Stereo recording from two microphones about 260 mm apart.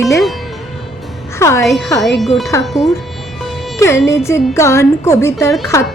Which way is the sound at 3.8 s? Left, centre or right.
Centre.